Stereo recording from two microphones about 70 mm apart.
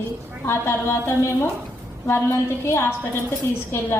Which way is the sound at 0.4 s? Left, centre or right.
Left.